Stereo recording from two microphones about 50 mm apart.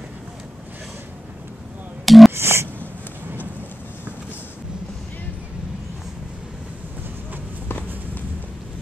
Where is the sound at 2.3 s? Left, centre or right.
Right.